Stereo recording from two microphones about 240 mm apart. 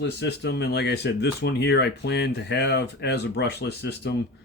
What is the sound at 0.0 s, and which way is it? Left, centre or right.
Speech, left.